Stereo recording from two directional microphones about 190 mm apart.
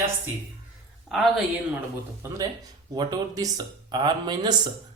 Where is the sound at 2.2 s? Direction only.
15° right (ahead or behind).